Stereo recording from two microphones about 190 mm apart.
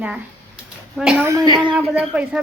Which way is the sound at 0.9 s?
5° right (ahead or behind).